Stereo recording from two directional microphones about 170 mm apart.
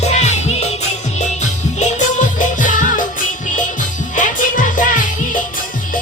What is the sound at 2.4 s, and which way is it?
Music, 50° left (ahead or behind).